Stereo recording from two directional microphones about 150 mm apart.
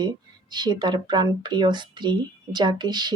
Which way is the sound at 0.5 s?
30° right (ahead or behind).